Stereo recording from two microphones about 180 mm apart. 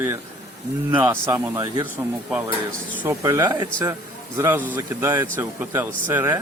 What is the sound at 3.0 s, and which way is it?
Speech, 15° right (ahead or behind).